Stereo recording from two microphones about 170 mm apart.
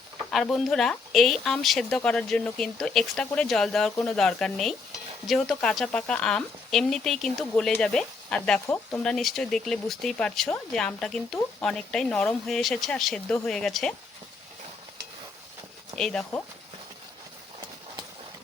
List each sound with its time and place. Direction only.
0.3 s speech: centre (ahead or behind)
8.6 s speech: 15° left (ahead or behind)
9.0 s speech: centre (ahead or behind)
16.0 s speech: 5° left (ahead or behind)